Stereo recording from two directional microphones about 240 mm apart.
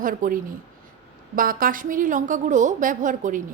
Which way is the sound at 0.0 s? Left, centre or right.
Right.